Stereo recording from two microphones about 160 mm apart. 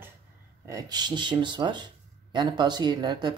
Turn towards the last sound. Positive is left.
turn(degrees=-25)  # may be behind; listen again after turning